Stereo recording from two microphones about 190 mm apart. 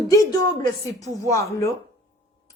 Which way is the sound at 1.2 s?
15° left (ahead or behind).